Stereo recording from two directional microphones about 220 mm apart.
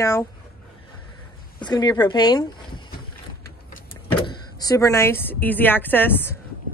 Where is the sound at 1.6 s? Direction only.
20° left (ahead or behind).